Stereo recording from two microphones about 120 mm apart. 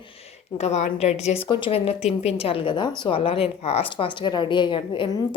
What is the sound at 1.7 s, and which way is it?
A woman's voice, 60° left (ahead or behind).